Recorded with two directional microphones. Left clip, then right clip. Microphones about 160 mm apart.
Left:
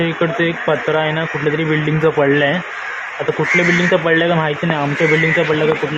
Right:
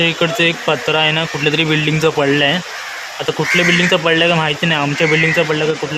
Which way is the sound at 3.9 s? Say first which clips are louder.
Right 1 dB; 30° right (ahead or behind).